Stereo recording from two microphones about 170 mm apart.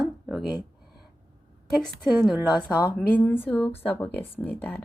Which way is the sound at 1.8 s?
Centre (ahead or behind).